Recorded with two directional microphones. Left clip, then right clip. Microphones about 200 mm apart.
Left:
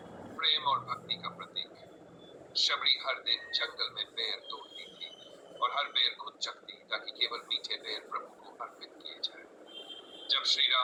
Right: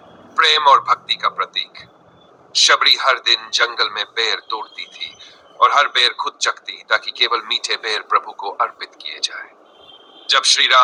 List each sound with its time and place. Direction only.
0.3 s a man's voice: 45° right (ahead or behind)